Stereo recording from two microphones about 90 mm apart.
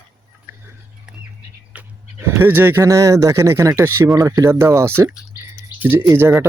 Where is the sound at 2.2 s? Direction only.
25° right (ahead or behind).